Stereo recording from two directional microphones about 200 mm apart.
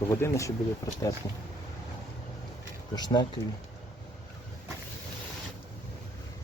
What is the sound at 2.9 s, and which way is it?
Speech, 20° left (ahead or behind).